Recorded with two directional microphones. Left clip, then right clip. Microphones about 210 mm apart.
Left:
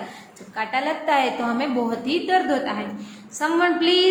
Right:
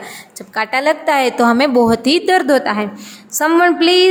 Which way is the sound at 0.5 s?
55° right (ahead or behind).